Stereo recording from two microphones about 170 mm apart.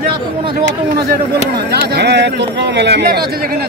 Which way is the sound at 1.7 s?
75° right (ahead or behind).